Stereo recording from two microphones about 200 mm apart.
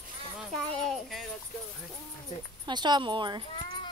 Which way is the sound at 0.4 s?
Centre (ahead or behind).